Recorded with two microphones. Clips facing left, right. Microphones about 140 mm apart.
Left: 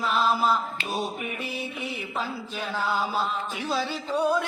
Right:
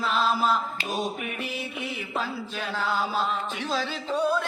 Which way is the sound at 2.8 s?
15° left (ahead or behind).